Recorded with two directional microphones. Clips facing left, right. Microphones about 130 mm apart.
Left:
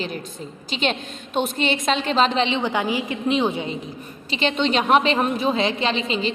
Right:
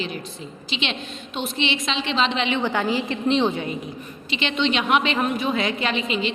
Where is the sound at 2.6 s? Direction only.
15° left (ahead or behind).